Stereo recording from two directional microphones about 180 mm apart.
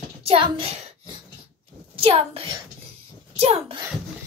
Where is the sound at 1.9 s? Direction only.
30° right (ahead or behind).